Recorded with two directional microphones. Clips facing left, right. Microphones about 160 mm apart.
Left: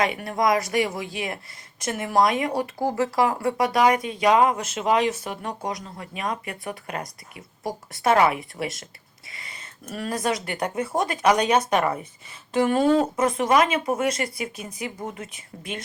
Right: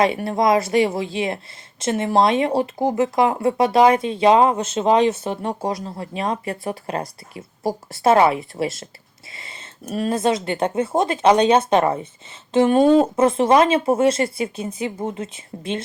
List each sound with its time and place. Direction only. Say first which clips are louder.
0.0 s speech: right 5 dB; 30° right (ahead or behind)